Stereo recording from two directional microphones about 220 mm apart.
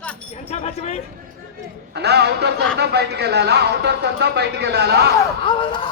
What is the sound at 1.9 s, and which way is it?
Speech, 50° right (ahead or behind).